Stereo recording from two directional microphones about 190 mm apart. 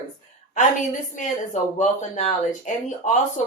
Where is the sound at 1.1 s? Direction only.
40° left (ahead or behind).